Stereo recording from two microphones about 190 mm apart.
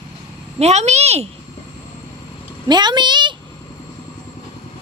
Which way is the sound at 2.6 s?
25° right (ahead or behind).